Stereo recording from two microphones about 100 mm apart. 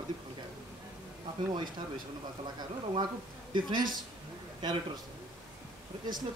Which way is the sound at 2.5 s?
50° right (ahead or behind).